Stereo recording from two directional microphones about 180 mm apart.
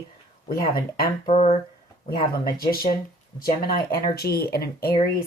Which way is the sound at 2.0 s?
55° left (ahead or behind).